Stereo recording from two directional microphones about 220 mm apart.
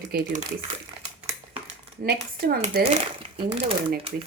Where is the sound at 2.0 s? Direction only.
40° right (ahead or behind).